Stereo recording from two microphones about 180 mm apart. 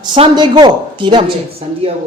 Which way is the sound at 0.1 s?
25° right (ahead or behind).